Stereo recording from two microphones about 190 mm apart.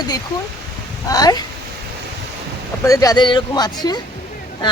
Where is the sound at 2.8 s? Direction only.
15° left (ahead or behind).